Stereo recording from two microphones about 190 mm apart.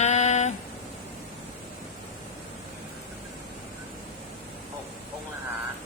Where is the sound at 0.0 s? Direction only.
35° left (ahead or behind).